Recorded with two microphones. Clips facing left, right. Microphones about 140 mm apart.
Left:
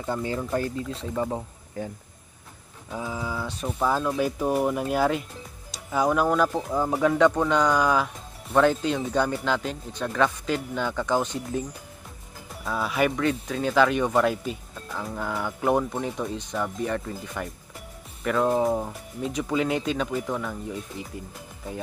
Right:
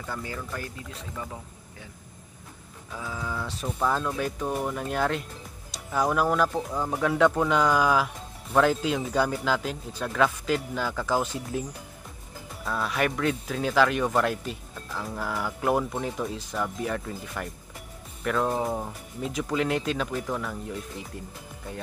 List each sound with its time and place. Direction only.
0.0 s speech: 25° left (ahead or behind)
2.9 s speech: 20° left (ahead or behind)
3.3 s speech: centre (ahead or behind)
6.5 s speech: 15° left (ahead or behind)
7.0 s speech: centre (ahead or behind)
12.6 s speech: centre (ahead or behind)